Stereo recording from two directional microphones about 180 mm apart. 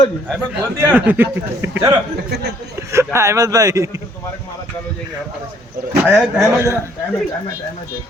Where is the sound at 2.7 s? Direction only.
15° right (ahead or behind).